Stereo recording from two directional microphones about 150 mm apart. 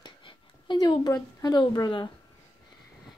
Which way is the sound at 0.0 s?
35° left (ahead or behind).